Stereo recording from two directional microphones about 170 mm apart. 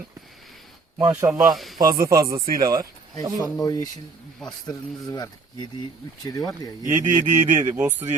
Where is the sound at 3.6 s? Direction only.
20° left (ahead or behind).